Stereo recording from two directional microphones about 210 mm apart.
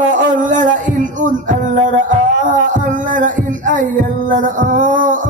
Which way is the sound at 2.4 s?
40° right (ahead or behind).